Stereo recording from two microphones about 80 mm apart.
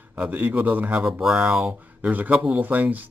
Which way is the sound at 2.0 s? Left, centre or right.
Centre.